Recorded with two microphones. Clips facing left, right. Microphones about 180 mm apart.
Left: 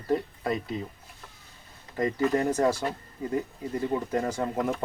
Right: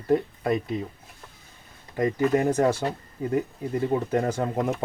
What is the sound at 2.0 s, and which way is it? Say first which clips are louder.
Speech: right 3 dB; 15° right (ahead or behind).